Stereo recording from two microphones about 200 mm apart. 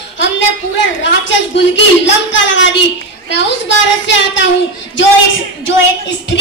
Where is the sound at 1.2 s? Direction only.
65° left (ahead or behind).